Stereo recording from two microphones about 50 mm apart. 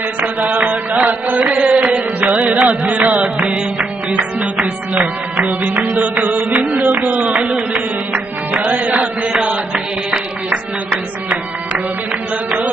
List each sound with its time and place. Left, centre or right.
0.2 s music: right
4.4 s music: centre
5.9 s music: right
7.0 s speech: right
8.1 s music: right
12.4 s a sound: right